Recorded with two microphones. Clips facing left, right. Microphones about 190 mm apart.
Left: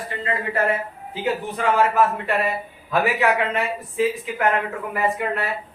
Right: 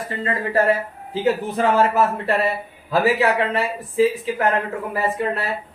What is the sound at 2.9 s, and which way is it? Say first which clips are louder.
Speech: right 2 dB; 35° right (ahead or behind).